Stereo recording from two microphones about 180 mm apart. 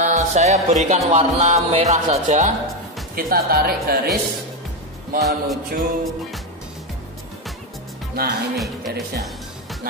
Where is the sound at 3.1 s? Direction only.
55° right (ahead or behind).